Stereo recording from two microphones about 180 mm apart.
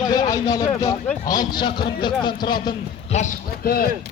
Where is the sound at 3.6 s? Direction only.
55° left (ahead or behind).